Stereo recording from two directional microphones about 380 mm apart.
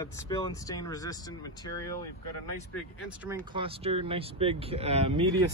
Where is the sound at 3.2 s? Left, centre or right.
Centre.